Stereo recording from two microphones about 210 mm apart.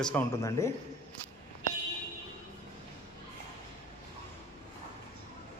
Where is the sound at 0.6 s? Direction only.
15° left (ahead or behind).